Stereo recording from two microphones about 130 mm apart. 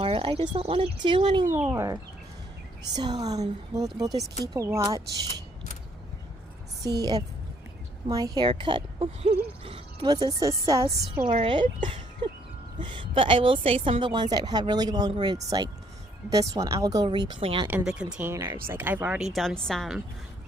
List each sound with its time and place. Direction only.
0.0 s speech: 40° right (ahead or behind)
1.7 s speech: 25° right (ahead or behind)
3.0 s speech: 30° right (ahead or behind)
6.8 s speech: 30° right (ahead or behind); by 10.1 s 45° right (ahead or behind)
10.1 s speech: 30° right (ahead or behind)
11.3 s speech: 40° right (ahead or behind)
17.7 s speech: 10° right (ahead or behind)
18.3 s speech: 20° right (ahead or behind)
19.3 s a woman's voice: centre (ahead or behind)